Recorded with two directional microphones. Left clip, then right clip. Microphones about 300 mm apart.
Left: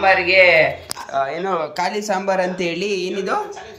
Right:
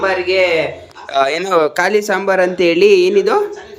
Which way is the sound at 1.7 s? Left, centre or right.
Centre.